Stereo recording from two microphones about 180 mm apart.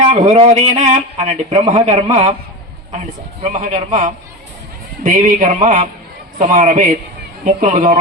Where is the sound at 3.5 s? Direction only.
45° right (ahead or behind).